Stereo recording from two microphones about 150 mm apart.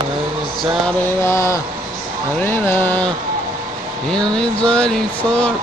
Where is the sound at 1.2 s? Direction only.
20° left (ahead or behind).